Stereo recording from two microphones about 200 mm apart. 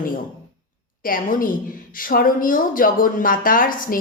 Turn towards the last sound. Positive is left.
turn(degrees=45)  # may be behind; listen again after turning